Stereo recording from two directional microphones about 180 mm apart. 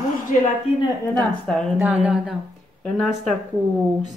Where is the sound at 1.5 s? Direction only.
5° left (ahead or behind).